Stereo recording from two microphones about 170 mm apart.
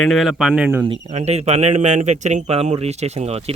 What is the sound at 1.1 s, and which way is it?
Speech, 40° right (ahead or behind).